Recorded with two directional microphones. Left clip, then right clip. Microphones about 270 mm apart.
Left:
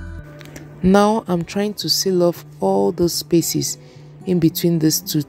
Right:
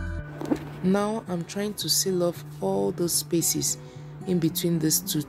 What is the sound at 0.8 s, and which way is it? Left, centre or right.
Speech, left.